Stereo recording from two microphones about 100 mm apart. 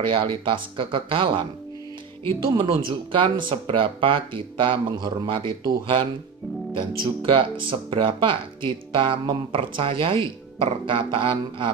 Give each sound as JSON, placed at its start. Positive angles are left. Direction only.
{"t": 0.1, "sound": "speech", "side_deg": -55}
{"t": 2.5, "sound": "speech", "side_deg": -55}
{"t": 7.2, "sound": "speech", "side_deg": -60}